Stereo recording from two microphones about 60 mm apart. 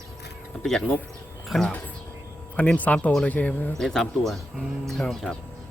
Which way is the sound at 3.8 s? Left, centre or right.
Centre.